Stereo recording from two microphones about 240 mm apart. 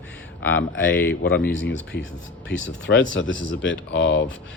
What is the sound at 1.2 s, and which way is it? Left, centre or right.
Speech, left.